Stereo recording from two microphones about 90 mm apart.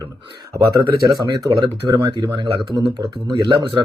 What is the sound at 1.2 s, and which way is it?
Speech, 55° right (ahead or behind).